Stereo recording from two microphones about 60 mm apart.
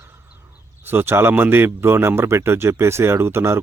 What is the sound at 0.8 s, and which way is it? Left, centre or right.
A man's voice, right.